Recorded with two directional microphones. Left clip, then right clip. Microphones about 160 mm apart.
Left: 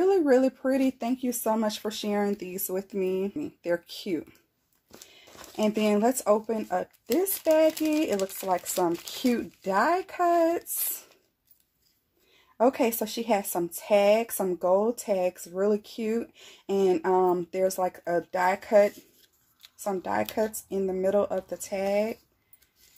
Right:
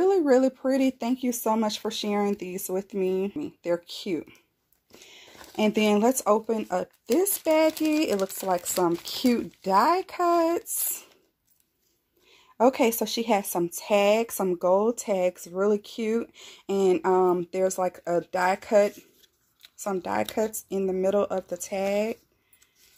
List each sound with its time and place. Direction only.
0.0 s speech: 20° right (ahead or behind)
5.6 s speech: 45° right (ahead or behind)
12.5 s speech: 40° right (ahead or behind)